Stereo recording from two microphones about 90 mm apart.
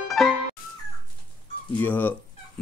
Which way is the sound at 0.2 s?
Centre (ahead or behind).